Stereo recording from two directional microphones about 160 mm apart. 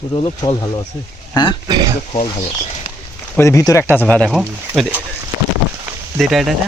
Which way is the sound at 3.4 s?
20° left (ahead or behind).